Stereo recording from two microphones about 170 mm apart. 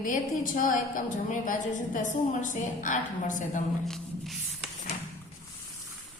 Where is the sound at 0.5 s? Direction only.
50° left (ahead or behind).